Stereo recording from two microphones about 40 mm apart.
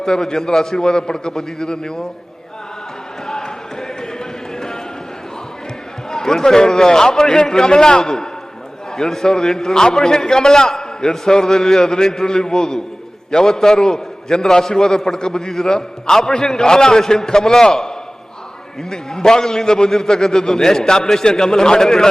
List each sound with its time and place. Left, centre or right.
0.0 s a man's voice: centre
3.2 s run: centre
6.1 s a man's voice: centre